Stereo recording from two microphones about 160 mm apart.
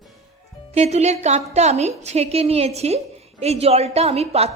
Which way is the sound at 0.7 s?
40° right (ahead or behind).